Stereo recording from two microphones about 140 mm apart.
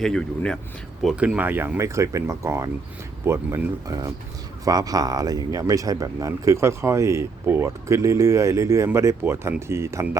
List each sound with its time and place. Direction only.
0.0 s speech: 5° left (ahead or behind)
1.0 s speech: 5° right (ahead or behind)